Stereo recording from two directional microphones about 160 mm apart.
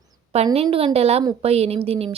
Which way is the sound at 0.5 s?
40° right (ahead or behind).